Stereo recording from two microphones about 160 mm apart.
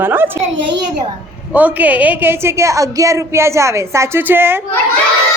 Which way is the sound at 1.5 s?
10° right (ahead or behind).